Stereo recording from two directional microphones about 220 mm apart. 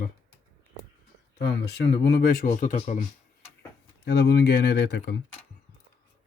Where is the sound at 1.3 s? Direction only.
50° left (ahead or behind).